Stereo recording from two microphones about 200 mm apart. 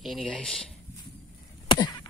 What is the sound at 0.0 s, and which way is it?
Speech, centre (ahead or behind).